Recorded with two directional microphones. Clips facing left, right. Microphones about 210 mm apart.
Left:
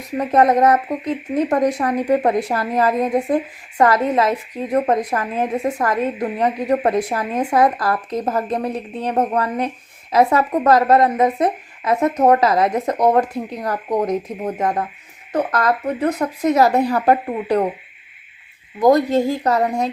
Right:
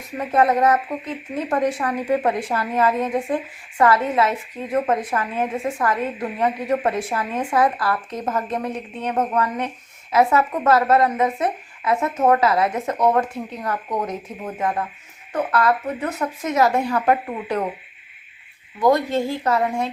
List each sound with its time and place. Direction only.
0.2 s a woman's voice: 40° left (ahead or behind)
18.8 s a woman's voice: 40° left (ahead or behind)